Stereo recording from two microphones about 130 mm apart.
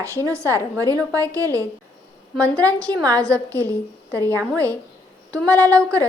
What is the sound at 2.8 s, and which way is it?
A woman's voice, 10° left (ahead or behind).